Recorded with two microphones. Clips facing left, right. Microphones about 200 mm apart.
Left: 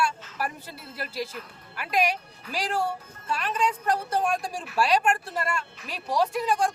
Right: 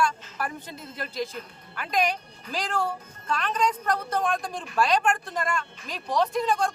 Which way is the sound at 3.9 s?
30° left (ahead or behind).